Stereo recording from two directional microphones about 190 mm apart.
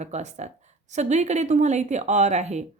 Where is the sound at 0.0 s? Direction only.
35° right (ahead or behind).